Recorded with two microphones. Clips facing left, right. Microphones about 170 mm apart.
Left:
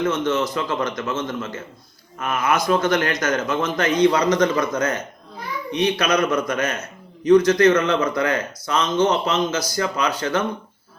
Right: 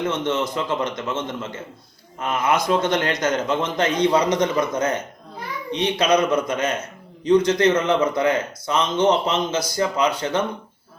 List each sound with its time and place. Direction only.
0.1 s a man's voice: 25° right (ahead or behind)